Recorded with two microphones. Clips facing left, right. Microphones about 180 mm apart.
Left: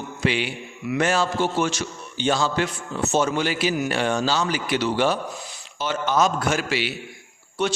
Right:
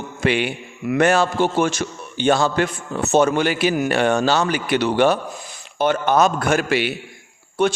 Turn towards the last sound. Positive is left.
turn(degrees=-50)  # may be behind; listen again after turning